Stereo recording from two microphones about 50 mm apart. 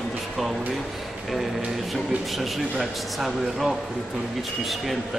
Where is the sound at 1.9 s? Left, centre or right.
Centre.